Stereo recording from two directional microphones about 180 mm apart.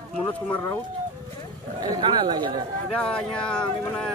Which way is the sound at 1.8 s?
25° right (ahead or behind).